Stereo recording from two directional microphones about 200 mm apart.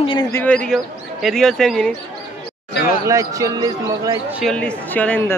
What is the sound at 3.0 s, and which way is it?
Speech, 15° right (ahead or behind).